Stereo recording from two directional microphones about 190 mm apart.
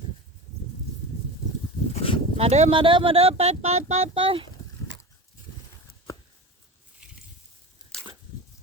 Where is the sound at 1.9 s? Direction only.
30° left (ahead or behind).